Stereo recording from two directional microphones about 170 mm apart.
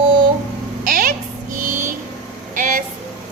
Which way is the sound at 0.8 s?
55° right (ahead or behind).